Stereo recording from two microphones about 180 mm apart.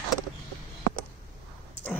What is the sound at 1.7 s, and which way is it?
Clicking, 10° left (ahead or behind).